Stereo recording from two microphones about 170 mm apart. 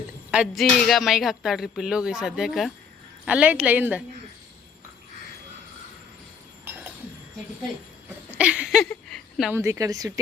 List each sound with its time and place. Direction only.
0.3 s a woman's voice: 5° right (ahead or behind)
8.4 s a sound: 5° right (ahead or behind)
9.5 s a woman's voice: 15° right (ahead or behind)